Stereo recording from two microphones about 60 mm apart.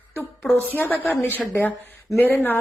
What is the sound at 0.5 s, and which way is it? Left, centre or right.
Speech, left.